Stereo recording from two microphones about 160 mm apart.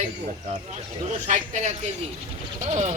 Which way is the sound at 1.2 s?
50° right (ahead or behind).